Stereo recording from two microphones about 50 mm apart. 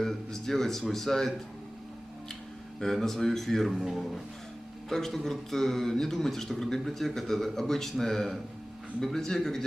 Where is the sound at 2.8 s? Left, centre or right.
Centre.